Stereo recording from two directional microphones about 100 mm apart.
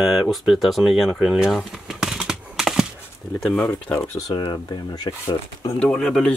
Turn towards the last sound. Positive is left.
turn(degrees=5)  # may be behind; listen again after turning